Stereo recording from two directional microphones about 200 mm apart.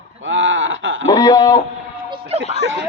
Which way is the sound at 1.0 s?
20° left (ahead or behind).